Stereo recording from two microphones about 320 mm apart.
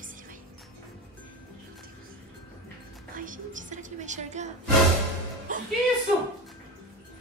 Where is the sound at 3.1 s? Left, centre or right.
Right.